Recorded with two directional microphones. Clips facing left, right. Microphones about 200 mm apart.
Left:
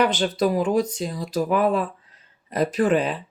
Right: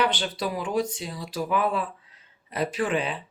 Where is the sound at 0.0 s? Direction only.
45° left (ahead or behind).